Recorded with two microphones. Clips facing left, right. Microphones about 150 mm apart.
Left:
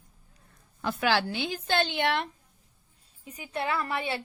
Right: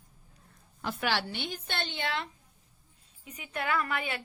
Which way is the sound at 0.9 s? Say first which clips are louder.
Left 6 dB; 90° left.